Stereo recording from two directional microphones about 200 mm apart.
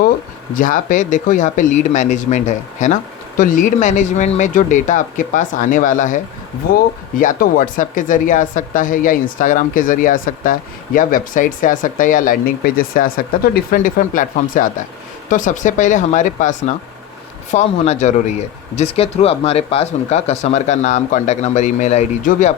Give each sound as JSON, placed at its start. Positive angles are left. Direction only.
{"t": 0.5, "sound": "speech", "side_deg": 40}